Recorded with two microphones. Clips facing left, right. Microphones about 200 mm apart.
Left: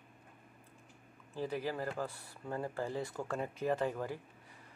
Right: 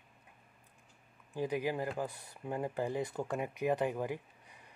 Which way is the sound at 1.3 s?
15° right (ahead or behind).